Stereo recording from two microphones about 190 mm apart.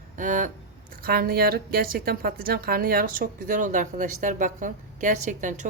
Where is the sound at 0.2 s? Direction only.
40° right (ahead or behind).